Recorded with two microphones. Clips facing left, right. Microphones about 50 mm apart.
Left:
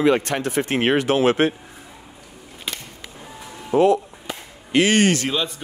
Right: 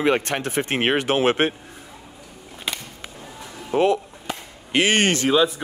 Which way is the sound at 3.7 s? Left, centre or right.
Right.